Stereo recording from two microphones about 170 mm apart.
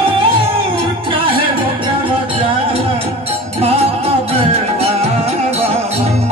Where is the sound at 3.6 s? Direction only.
35° right (ahead or behind).